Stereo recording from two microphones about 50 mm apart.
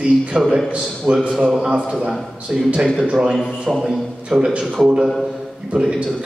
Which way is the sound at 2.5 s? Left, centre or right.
Centre.